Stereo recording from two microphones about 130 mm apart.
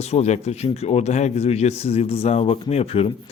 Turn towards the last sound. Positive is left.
turn(degrees=50)  # may be behind; listen again after turning